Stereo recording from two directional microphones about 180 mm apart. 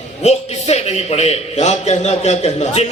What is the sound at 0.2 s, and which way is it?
A man's voice, 35° left (ahead or behind).